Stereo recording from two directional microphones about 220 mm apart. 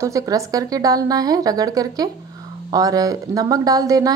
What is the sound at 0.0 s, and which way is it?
A woman's voice, 15° right (ahead or behind).